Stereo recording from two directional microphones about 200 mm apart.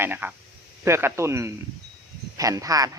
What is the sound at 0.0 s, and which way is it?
A man's voice, 10° right (ahead or behind).